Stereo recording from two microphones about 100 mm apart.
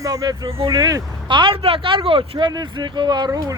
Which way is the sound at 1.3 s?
55° right (ahead or behind).